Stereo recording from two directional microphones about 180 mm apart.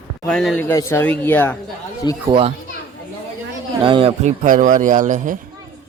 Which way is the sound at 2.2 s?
30° right (ahead or behind).